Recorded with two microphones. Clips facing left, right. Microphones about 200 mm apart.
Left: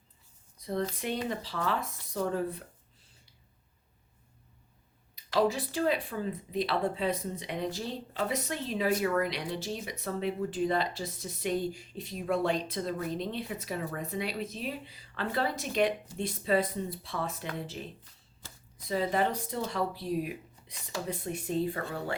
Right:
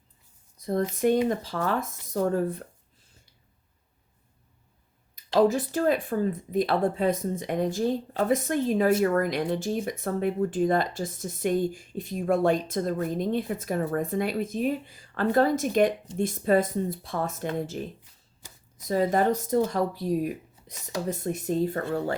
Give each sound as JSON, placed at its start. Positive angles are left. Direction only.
{"t": 0.6, "sound": "speech", "side_deg": -45}
{"t": 5.4, "sound": "speech", "side_deg": -45}
{"t": 18.4, "sound": "a sound", "side_deg": -15}
{"t": 18.9, "sound": "speech", "side_deg": -45}